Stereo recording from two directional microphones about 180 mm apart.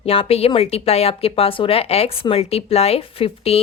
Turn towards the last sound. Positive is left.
turn(degrees=35)  # may be behind; listen again after turning